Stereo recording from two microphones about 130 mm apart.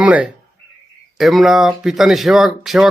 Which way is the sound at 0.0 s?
10° right (ahead or behind).